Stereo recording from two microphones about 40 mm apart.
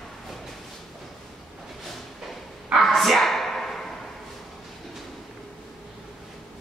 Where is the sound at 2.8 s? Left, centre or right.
Centre.